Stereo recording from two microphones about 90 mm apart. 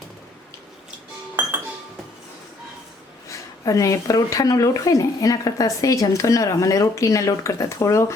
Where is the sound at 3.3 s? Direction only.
35° left (ahead or behind).